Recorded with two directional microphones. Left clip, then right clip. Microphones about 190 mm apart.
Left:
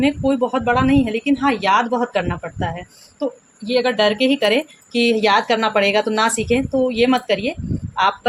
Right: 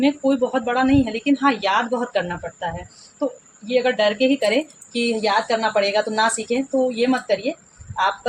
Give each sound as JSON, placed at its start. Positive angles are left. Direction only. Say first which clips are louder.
{"t": 0.0, "sound": "speech", "louder": "left 1 dB", "side_deg": 15}
{"t": 3.7, "sound": "speech", "louder": "left 2 dB", "side_deg": 35}